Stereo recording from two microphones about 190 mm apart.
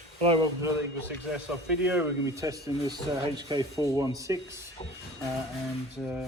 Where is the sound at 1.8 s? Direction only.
10° right (ahead or behind).